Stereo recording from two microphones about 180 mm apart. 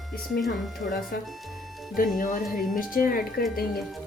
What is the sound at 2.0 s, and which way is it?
Speech, 45° left (ahead or behind).